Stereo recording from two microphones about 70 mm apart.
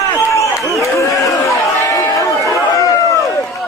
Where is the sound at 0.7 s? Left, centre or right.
Left.